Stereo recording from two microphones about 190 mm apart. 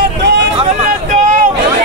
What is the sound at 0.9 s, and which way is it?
Vehicle, 40° right (ahead or behind).